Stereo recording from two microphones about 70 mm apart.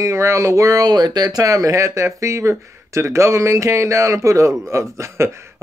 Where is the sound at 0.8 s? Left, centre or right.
Right.